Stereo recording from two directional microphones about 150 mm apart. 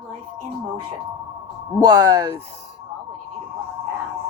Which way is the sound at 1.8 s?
25° right (ahead or behind).